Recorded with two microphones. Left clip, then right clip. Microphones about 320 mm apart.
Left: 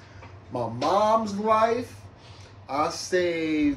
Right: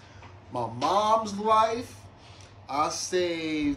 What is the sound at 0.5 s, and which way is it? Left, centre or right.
Speech, centre.